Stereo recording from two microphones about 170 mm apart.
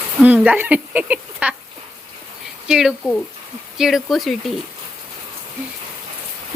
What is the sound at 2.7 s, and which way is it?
Speech, 5° right (ahead or behind).